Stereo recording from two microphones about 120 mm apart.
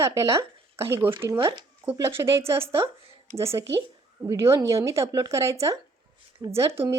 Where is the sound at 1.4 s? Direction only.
40° right (ahead or behind).